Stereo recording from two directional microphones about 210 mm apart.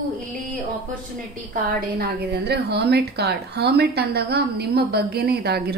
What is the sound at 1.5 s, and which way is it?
A woman's voice, 45° right (ahead or behind).